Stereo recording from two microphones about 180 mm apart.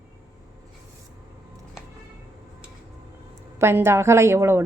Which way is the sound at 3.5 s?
15° right (ahead or behind).